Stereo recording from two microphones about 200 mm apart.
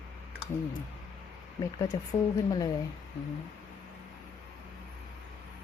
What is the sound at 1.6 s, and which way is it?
Speech, 15° left (ahead or behind).